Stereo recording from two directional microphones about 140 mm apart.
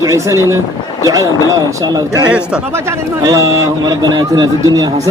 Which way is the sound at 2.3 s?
10° right (ahead or behind).